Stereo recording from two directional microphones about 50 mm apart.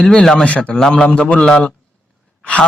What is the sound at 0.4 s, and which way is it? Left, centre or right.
Speech, left.